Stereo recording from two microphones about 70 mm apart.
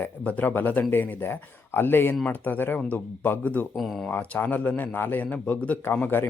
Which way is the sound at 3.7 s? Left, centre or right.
Centre.